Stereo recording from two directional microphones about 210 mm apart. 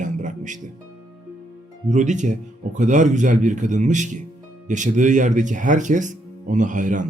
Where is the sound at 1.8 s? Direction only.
35° right (ahead or behind).